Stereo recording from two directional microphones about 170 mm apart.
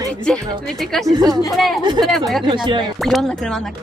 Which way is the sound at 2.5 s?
25° right (ahead or behind).